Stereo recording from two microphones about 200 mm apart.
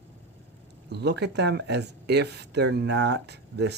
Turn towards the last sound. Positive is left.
turn(degrees=-55)  # may be behind; listen again after turning